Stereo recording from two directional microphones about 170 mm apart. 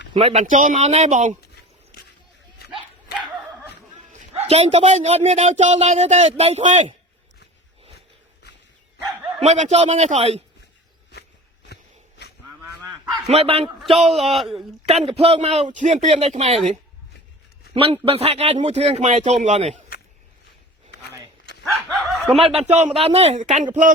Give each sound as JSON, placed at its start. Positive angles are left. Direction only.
{"t": 0.1, "sound": "speech", "side_deg": -35}
{"t": 0.4, "sound": "speech", "side_deg": -50}
{"t": 4.2, "sound": "a man's voice", "side_deg": -40}
{"t": 9.4, "sound": "a man's voice", "side_deg": -40}
{"t": 13.2, "sound": "a man's voice", "side_deg": -35}
{"t": 14.2, "sound": "speech", "side_deg": 0}
{"t": 14.8, "sound": "a man's voice", "side_deg": -35}
{"t": 17.9, "sound": "a man's voice", "side_deg": -35}
{"t": 21.6, "sound": "snicker", "side_deg": 0}
{"t": 22.4, "sound": "a man's voice", "side_deg": -35}